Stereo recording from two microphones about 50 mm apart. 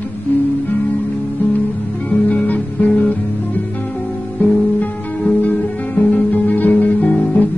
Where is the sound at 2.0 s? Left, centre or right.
Left.